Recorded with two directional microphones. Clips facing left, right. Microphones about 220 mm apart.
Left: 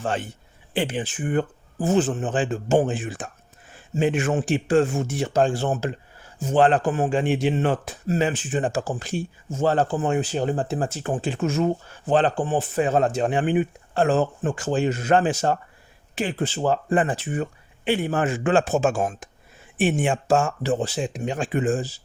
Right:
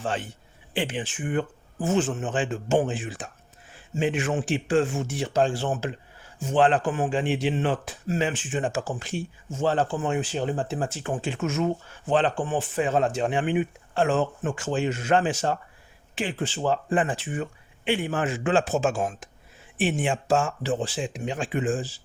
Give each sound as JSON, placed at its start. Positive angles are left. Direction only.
{"t": 0.0, "sound": "speech", "side_deg": 45}